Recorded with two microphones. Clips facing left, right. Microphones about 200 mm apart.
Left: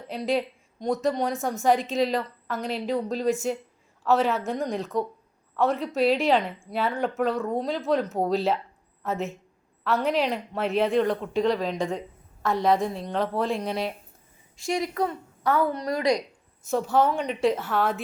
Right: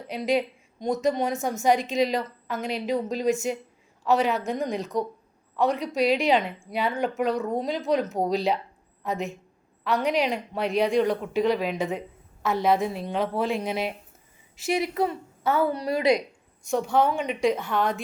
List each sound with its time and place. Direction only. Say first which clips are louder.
0.1 s a woman's voice: right 1 dB; centre (ahead or behind)
15.9 s a woman's voice: right 3 dB; 25° right (ahead or behind)
16.6 s a woman's voice: even; 5° left (ahead or behind)